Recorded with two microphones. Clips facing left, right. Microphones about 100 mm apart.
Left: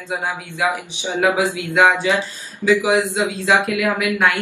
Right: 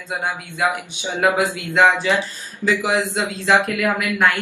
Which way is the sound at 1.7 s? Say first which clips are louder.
Even; 15° left (ahead or behind).